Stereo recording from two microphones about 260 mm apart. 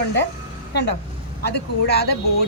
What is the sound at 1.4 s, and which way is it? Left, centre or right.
Speech, left.